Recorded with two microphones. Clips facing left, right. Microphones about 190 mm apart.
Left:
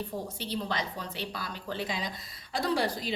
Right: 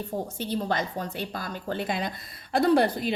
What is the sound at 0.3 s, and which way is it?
A woman's voice, 50° right (ahead or behind).